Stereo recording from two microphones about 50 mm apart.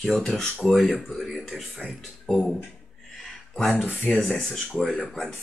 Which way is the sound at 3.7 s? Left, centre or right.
Left.